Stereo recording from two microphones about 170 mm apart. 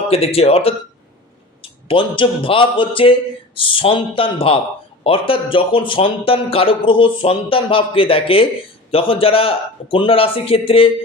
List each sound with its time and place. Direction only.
0.1 s speech: 35° left (ahead or behind)
1.9 s speech: 30° left (ahead or behind)